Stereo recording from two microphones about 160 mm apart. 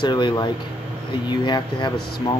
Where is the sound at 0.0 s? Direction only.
30° left (ahead or behind).